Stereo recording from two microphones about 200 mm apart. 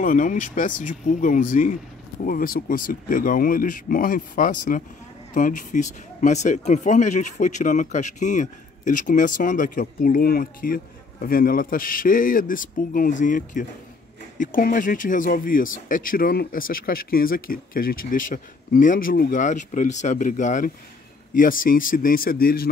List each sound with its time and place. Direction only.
0.0 s speech: 40° left (ahead or behind)